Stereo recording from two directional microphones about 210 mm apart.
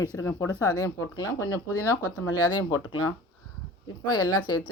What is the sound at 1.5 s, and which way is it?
Speech, 90° left.